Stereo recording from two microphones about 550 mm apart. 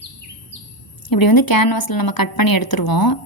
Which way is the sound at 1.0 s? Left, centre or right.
Left.